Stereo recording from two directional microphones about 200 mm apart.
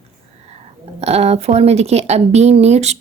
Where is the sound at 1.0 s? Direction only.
30° right (ahead or behind).